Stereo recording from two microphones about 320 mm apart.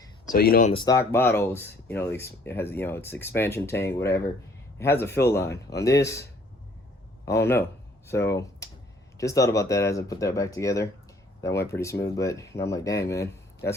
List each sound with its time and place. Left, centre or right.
0.3 s speech: left
0.7 s speech: centre
7.3 s speech: centre